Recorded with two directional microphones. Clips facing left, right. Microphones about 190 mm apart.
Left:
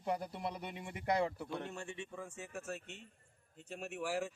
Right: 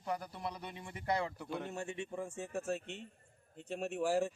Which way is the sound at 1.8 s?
25° right (ahead or behind).